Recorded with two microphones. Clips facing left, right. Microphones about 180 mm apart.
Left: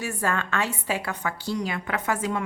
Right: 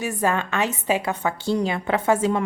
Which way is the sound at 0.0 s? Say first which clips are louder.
Right 4 dB; 20° right (ahead or behind).